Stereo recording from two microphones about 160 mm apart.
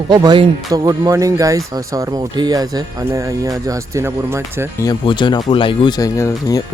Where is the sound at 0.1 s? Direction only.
25° right (ahead or behind).